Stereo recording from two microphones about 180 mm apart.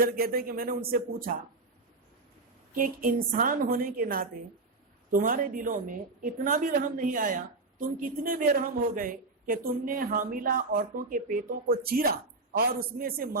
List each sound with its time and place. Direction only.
0.0 s speech: 55° right (ahead or behind)
2.7 s a woman's voice: 50° right (ahead or behind)